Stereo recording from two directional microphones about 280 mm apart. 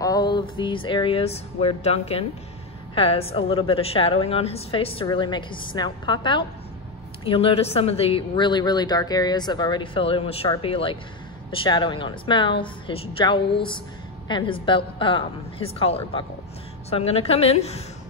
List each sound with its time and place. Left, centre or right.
0.0 s a woman's voice: centre